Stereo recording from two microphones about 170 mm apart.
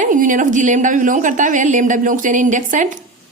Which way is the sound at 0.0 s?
50° right (ahead or behind).